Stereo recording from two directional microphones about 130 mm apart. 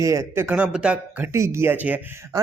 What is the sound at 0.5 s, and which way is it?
Speech, 10° right (ahead or behind).